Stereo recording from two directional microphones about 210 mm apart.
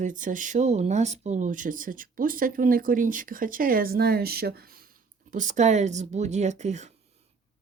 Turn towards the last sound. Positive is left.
turn(degrees=-35)  # may be behind; listen again after turning